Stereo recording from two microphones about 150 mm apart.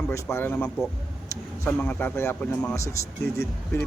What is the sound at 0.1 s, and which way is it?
Speech, 20° left (ahead or behind).